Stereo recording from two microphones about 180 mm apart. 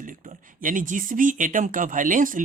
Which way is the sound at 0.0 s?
50° right (ahead or behind).